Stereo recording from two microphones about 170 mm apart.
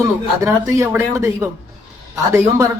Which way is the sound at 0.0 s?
15° right (ahead or behind).